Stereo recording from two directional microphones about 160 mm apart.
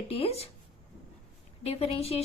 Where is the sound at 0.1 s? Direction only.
40° left (ahead or behind).